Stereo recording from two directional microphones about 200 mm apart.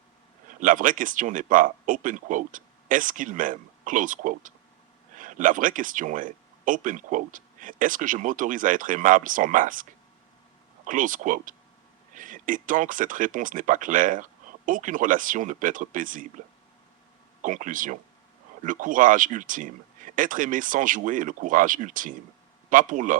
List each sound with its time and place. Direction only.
0.4 s speech: 40° right (ahead or behind)
10.8 s speech: 40° right (ahead or behind)
17.4 s speech: 40° right (ahead or behind)